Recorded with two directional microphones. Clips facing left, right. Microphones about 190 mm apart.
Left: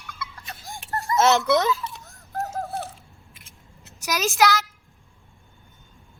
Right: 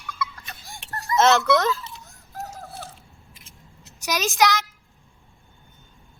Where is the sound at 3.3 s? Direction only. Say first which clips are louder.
Right 1 dB; 60° left (ahead or behind).